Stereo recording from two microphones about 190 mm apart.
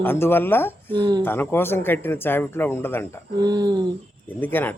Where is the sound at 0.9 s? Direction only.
25° right (ahead or behind).